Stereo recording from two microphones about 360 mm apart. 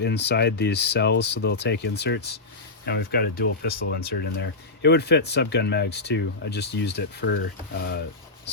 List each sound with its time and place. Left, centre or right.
0.0 s speech: left